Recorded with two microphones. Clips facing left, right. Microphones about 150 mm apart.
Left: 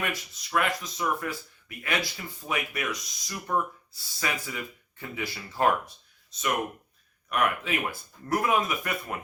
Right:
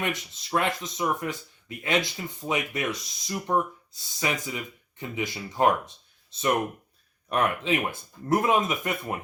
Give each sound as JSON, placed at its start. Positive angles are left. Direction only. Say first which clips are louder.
{"t": 0.0, "sound": "speech", "louder": "right 2 dB", "side_deg": -25}
{"t": 7.3, "sound": "speech", "louder": "right 2 dB", "side_deg": -25}